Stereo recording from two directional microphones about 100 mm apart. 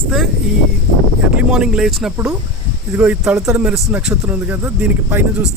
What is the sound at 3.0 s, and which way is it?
Speech, 15° right (ahead or behind).